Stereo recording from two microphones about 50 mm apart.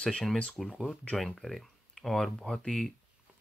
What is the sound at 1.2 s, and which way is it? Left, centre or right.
Speech, centre.